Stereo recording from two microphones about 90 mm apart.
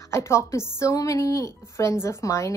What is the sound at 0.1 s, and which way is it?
A woman's voice, 30° left (ahead or behind).